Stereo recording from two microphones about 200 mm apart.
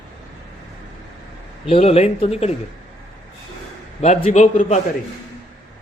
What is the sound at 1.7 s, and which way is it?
Speech, 30° left (ahead or behind).